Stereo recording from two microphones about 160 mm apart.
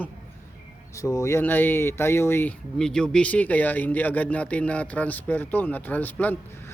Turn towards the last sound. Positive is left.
turn(degrees=10)  # may be behind; listen again after turning